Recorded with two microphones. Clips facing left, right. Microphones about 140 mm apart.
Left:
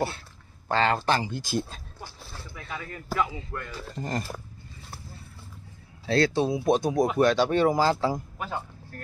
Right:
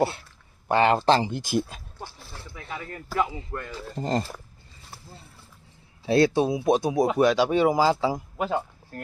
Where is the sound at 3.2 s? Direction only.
25° right (ahead or behind).